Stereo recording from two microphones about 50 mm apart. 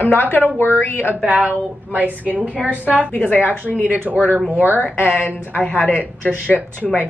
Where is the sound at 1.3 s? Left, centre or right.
Right.